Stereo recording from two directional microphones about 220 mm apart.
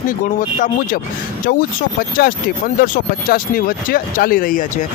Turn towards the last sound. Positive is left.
turn(degrees=40)  # may be behind; listen again after turning